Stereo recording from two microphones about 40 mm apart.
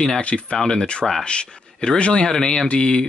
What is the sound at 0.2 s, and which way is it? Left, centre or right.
Speech, left.